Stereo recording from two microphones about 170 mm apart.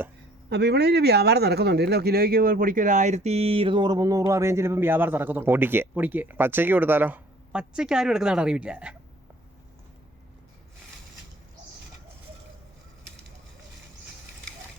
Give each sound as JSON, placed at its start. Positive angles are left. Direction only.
{"t": 0.5, "sound": "speech", "side_deg": -75}